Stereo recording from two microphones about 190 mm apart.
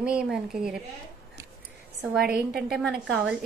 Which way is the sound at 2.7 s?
Centre (ahead or behind).